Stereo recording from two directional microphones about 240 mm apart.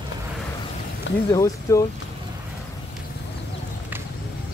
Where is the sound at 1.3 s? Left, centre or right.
Centre.